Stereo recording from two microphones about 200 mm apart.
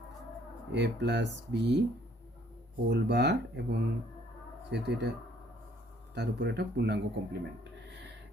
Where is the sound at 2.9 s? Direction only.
60° right (ahead or behind).